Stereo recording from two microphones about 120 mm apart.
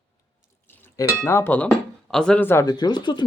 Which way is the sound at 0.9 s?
25° left (ahead or behind).